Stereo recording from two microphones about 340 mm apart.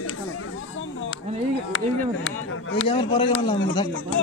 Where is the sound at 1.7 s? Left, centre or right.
Left.